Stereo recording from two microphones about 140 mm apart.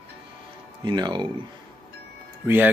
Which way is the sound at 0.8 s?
30° right (ahead or behind).